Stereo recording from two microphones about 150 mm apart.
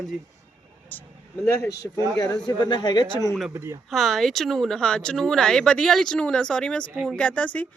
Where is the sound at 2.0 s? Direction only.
25° left (ahead or behind).